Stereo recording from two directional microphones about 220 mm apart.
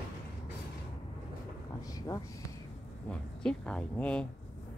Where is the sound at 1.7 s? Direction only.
15° left (ahead or behind).